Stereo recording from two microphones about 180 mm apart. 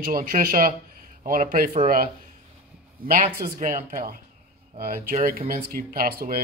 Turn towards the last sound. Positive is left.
turn(degrees=-55)  # may be behind; listen again after turning